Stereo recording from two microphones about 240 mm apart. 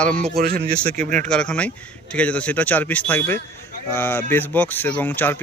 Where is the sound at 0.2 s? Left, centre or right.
Right.